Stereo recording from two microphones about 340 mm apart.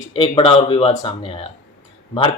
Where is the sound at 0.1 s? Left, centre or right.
Centre.